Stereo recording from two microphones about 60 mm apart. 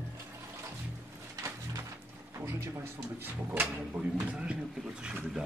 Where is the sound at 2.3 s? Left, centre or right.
Right.